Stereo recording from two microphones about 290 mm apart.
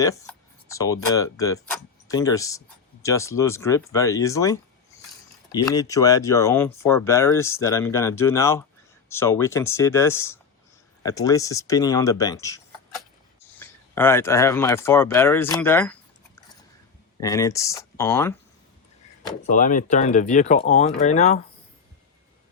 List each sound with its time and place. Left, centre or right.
0.0 s speech: centre
17.2 s speech: centre
19.5 s speech: left